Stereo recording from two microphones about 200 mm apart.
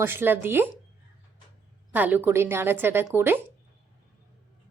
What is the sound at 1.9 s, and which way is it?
A woman's voice, 10° right (ahead or behind).